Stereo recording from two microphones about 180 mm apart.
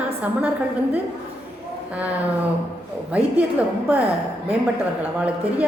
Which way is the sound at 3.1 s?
5° right (ahead or behind).